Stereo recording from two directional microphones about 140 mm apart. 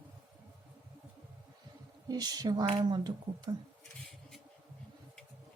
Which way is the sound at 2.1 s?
30° right (ahead or behind).